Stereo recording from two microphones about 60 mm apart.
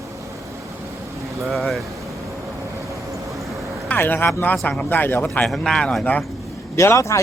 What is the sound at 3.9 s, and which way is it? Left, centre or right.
Speech, left.